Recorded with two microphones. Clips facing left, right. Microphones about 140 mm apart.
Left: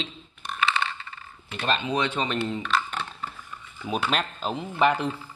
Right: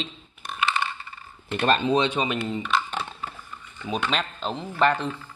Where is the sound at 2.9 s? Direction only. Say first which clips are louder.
Right 1 dB; 10° right (ahead or behind).